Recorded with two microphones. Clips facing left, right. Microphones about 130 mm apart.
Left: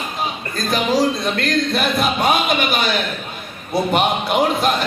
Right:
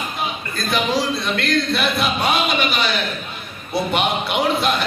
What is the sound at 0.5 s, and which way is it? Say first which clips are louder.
Speech: left 2 dB; 40° left (ahead or behind).